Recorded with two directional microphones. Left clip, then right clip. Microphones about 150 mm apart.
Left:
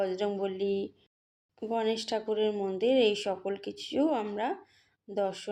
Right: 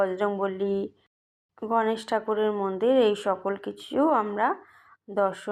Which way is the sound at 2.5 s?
10° left (ahead or behind).